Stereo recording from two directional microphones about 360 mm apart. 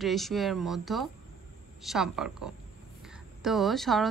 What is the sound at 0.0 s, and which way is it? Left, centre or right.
A woman's voice, centre.